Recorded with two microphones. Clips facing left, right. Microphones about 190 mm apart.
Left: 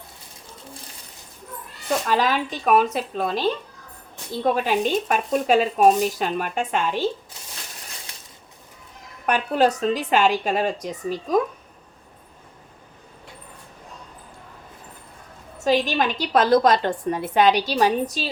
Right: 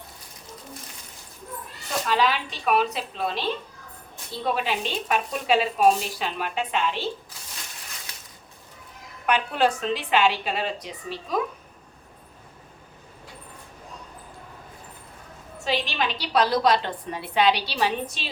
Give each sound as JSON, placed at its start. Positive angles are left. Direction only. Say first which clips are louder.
{"t": 2.0, "sound": "a woman's voice", "louder": "even", "side_deg": 45}
{"t": 9.2, "sound": "a woman's voice", "louder": "left 3 dB", "side_deg": 40}
{"t": 15.5, "sound": "a woman's voice", "louder": "left 7 dB", "side_deg": 45}